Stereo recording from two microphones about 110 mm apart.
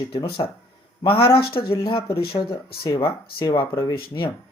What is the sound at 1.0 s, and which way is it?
Speech, 55° left (ahead or behind).